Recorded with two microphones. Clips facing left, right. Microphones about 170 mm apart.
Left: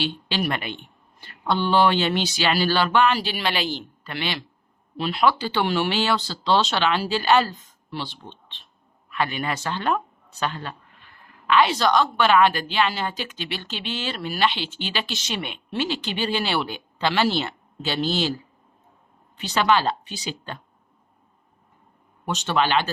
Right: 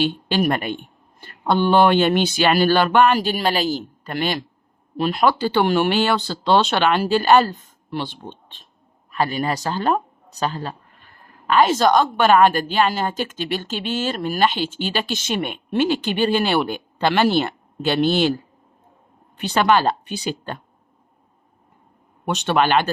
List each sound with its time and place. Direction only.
0.0 s speech: 50° right (ahead or behind)
19.4 s speech: 55° right (ahead or behind)
22.3 s speech: 60° right (ahead or behind)